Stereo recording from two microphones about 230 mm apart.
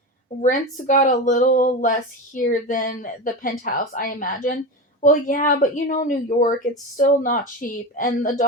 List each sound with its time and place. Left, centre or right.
0.4 s a woman's voice: left